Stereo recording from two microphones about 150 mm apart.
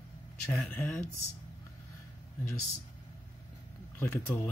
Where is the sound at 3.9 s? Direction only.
15° left (ahead or behind).